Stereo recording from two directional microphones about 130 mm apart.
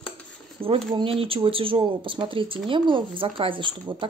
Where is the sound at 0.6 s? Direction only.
45° right (ahead or behind).